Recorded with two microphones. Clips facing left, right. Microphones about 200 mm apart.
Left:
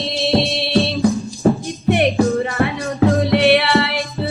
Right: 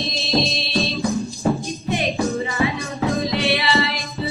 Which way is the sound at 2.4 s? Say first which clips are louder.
Left 3 dB; 60° left (ahead or behind).